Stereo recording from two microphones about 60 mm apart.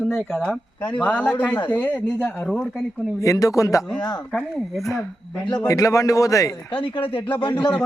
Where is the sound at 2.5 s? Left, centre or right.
Centre.